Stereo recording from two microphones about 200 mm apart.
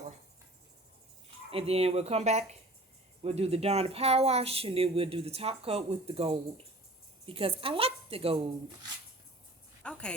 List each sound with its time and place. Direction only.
1.5 s a woman's voice: 30° right (ahead or behind)
9.8 s speech: 5° left (ahead or behind)